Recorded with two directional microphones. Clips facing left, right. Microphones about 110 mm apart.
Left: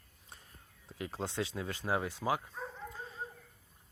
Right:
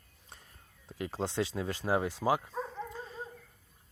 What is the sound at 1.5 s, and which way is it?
Speech, 25° right (ahead or behind).